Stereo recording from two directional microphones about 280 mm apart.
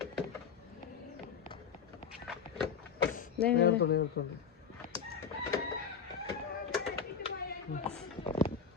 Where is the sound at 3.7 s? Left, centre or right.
Left.